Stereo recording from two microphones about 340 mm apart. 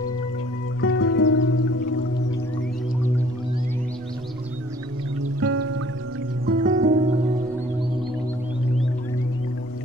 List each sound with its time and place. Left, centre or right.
0.7 s music: left
5.4 s music: right
6.4 s music: right